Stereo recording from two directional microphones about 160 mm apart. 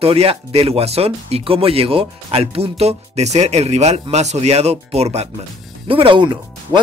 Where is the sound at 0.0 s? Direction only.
40° right (ahead or behind).